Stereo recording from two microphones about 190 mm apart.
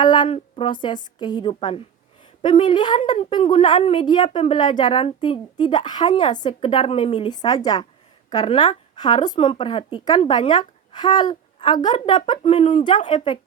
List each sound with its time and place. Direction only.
0.0 s a woman's voice: 25° left (ahead or behind)
6.1 s speech: 40° left (ahead or behind)
6.4 s a woman's voice: 25° left (ahead or behind)